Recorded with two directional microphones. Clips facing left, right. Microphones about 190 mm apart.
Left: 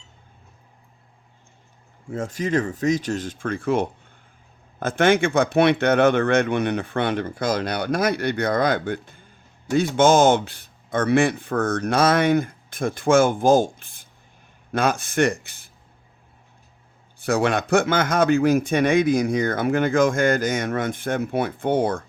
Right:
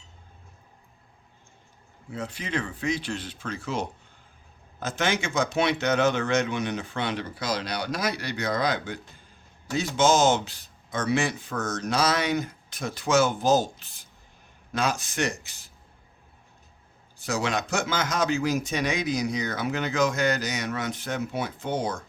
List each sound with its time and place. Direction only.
2.0 s speech: 45° left (ahead or behind)
17.2 s speech: 55° left (ahead or behind)